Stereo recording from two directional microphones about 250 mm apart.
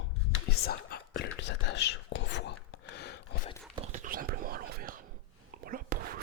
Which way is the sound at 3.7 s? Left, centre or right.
Right.